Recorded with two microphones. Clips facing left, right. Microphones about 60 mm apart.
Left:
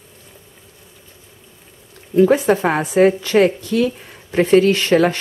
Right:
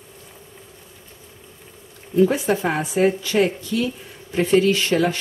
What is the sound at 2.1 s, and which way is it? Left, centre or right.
Speech, left.